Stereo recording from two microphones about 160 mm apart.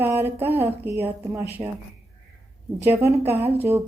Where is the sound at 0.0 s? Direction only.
10° right (ahead or behind).